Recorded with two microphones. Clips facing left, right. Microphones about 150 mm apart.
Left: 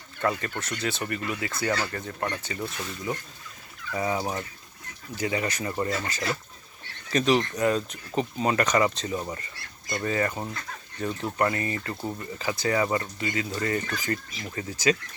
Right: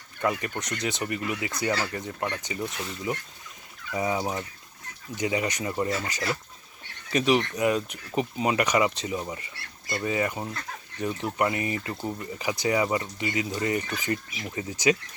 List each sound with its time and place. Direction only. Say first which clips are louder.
0.2 s speech: even; 15° right (ahead or behind)
9.6 s speech: even; 30° right (ahead or behind)
10.0 s speech: even; 10° right (ahead or behind)